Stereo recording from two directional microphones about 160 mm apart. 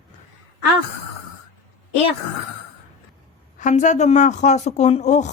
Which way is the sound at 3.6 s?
50° left (ahead or behind).